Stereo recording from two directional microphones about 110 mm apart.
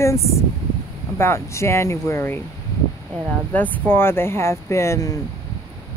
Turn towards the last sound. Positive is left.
turn(degrees=30)  # may be behind; listen again after turning